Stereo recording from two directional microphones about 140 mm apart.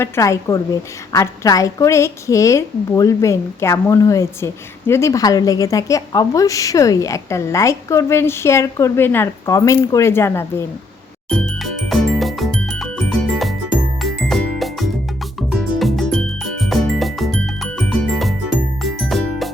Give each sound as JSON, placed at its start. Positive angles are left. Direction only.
{"t": 0.0, "sound": "a woman's voice", "side_deg": 20}
{"t": 11.3, "sound": "music", "side_deg": 0}